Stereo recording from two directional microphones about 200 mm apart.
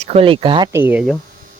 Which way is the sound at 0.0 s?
30° right (ahead or behind).